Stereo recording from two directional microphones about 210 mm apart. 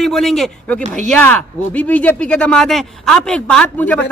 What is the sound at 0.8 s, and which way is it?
Speech, 35° right (ahead or behind).